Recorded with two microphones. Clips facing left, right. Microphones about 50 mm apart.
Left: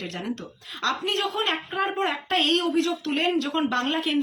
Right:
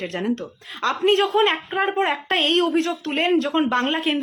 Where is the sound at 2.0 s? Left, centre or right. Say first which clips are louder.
Right 4 dB; right.